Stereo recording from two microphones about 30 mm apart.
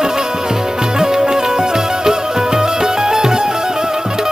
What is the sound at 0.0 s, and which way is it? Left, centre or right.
Music, right.